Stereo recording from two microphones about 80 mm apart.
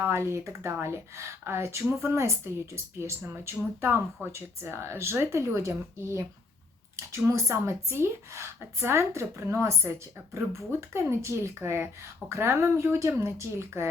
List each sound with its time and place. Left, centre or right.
0.0 s speech: right